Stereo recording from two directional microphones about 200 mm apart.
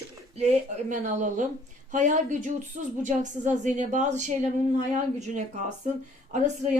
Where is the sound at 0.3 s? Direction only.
35° right (ahead or behind).